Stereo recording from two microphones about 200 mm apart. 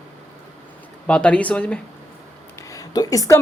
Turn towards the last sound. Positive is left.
turn(degrees=15)  # may be behind; listen again after turning